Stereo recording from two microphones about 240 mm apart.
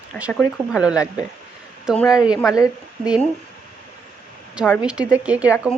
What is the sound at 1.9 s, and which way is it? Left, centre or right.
Speech, centre.